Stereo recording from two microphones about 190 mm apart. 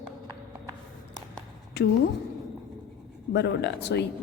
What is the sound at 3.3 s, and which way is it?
Speech, 60° left (ahead or behind).